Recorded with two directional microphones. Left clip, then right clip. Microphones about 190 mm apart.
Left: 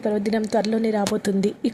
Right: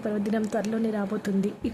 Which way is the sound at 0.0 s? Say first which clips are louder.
Left 6 dB; 20° left (ahead or behind).